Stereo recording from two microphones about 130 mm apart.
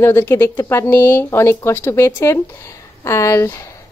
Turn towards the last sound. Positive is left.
turn(degrees=25)  # may be behind; listen again after turning